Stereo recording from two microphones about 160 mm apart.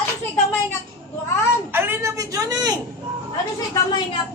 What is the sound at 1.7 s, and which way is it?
Speech, 15° right (ahead or behind).